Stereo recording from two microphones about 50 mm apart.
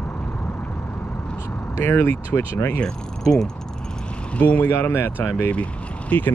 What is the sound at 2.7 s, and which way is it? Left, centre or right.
Speech, centre.